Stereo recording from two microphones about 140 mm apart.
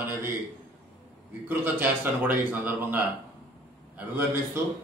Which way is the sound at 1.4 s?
15° right (ahead or behind).